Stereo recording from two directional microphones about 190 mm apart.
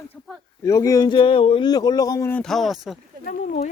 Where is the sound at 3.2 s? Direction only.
45° left (ahead or behind).